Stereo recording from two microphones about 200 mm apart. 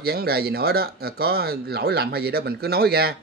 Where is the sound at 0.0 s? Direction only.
50° right (ahead or behind).